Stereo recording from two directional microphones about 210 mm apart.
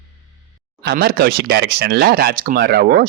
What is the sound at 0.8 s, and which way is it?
Speech, 50° right (ahead or behind).